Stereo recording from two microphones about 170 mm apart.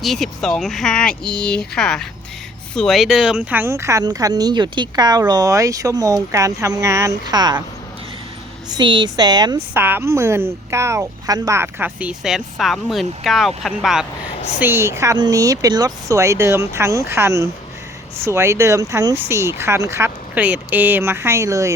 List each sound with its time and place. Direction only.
0.0 s speech: centre (ahead or behind); by 7.6 s 25° right (ahead or behind)
8.7 s speech: 25° right (ahead or behind)
9.7 s a woman's voice: 10° right (ahead or behind)
14.6 s a woman's voice: 15° right (ahead or behind)